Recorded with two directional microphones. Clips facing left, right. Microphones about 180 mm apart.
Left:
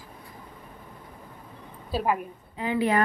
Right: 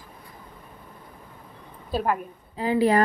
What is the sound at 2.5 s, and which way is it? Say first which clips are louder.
Speech: right 4 dB; 35° right (ahead or behind).